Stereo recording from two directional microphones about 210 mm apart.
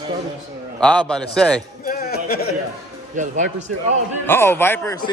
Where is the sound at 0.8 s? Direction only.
5° left (ahead or behind).